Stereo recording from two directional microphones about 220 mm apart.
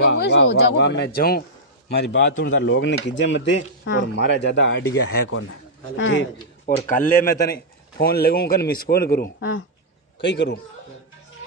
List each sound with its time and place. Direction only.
0.1 s speech: 50° left (ahead or behind)
6.6 s speech: 35° left (ahead or behind)
10.2 s speech: 55° left (ahead or behind)